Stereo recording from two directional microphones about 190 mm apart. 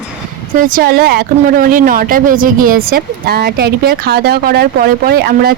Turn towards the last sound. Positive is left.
turn(degrees=-55)  # may be behind; listen again after turning